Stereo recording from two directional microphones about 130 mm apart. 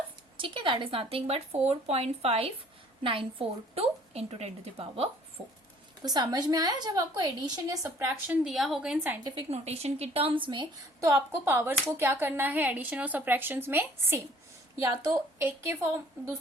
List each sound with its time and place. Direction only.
0.3 s speech: 40° right (ahead or behind)
6.0 s a woman's voice: 30° right (ahead or behind)
8.4 s a woman's voice: centre (ahead or behind)
9.5 s speech: 55° right (ahead or behind); by 10.7 s 40° right (ahead or behind)
11.0 s a woman's voice: 15° right (ahead or behind)